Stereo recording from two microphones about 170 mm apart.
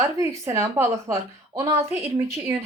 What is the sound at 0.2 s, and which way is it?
A woman's voice, 15° right (ahead or behind).